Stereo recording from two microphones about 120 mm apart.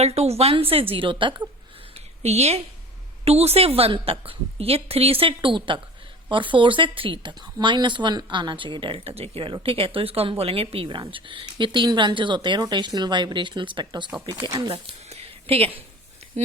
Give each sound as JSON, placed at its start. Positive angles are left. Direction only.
{"t": 0.0, "sound": "speech", "side_deg": -60}
{"t": 2.2, "sound": "a woman's voice", "side_deg": -65}
{"t": 15.1, "sound": "a sound", "side_deg": -55}